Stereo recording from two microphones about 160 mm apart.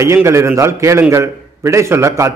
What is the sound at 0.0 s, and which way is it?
A man's voice, 15° right (ahead or behind).